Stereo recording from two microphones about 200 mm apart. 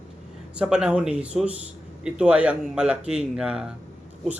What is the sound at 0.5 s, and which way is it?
A man's voice, 5° right (ahead or behind).